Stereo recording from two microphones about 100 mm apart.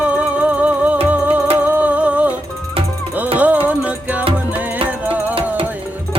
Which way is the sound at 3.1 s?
15° right (ahead or behind).